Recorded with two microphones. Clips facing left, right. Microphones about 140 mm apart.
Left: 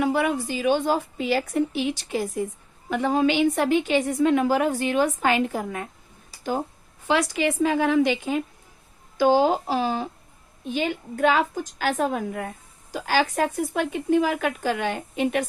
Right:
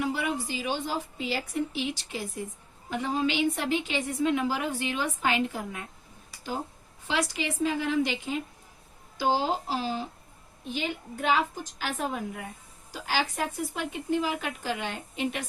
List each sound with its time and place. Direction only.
0.0 s a woman's voice: 60° left (ahead or behind)
7.1 s a woman's voice: 55° left (ahead or behind)
12.0 s a woman's voice: 60° left (ahead or behind)